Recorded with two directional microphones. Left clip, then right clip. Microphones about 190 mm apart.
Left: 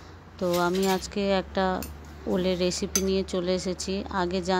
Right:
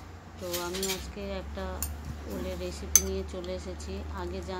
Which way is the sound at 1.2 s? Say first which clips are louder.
Left 12 dB; 45° left (ahead or behind).